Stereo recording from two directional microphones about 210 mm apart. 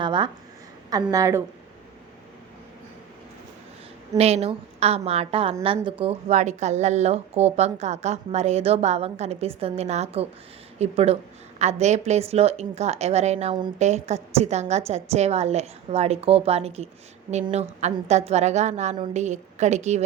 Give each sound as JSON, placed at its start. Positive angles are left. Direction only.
{"t": 0.0, "sound": "a sound", "side_deg": -20}
{"t": 0.9, "sound": "a woman's voice", "side_deg": -15}
{"t": 4.2, "sound": "a woman's voice", "side_deg": -30}